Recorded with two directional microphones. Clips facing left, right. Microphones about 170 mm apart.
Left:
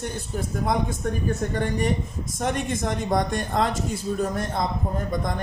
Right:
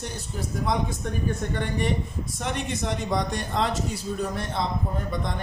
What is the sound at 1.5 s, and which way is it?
A man's voice, 40° left (ahead or behind).